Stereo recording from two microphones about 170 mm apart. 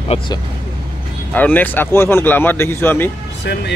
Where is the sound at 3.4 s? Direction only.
80° left.